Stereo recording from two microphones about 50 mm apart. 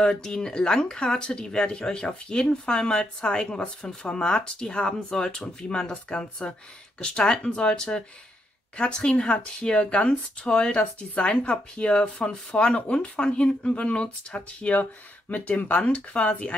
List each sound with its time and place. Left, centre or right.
0.0 s speech: centre